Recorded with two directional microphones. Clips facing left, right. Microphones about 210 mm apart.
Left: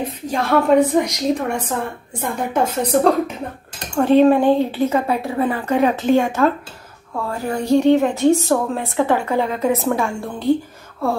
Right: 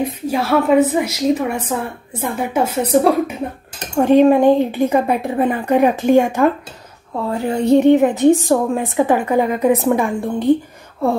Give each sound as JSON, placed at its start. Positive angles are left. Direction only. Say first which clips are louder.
{"t": 0.0, "sound": "a woman's voice", "louder": "right 3 dB", "side_deg": -5}
{"t": 7.2, "sound": "a sound", "louder": "right 4 dB", "side_deg": -25}
{"t": 7.7, "sound": "a woman's voice", "louder": "right 3 dB", "side_deg": -15}